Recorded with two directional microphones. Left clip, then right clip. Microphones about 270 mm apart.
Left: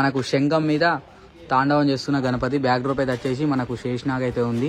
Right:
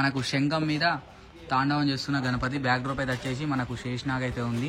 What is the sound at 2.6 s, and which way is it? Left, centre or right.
Speech, left.